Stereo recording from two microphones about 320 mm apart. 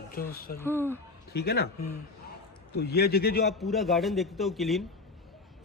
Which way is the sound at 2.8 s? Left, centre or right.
Left.